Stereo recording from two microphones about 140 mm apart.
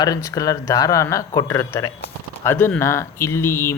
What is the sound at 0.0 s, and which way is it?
Speech, 25° left (ahead or behind).